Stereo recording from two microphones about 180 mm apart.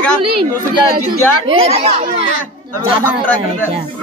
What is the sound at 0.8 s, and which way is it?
Speech, 60° right (ahead or behind).